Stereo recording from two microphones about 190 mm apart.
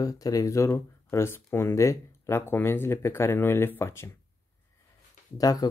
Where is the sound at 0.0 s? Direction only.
20° left (ahead or behind).